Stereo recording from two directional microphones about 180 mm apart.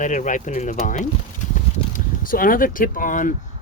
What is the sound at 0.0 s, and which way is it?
Speech, 45° left (ahead or behind).